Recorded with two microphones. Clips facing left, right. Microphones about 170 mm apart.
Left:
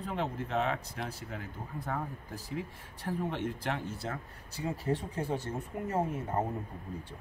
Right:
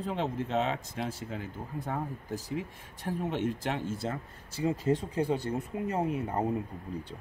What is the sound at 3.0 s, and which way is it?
A man's voice, 20° right (ahead or behind).